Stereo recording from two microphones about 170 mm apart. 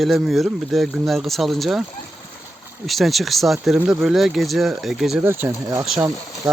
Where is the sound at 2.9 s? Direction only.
Centre (ahead or behind).